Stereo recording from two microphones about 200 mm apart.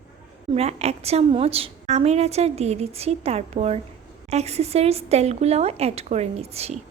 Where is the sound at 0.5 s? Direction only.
30° right (ahead or behind).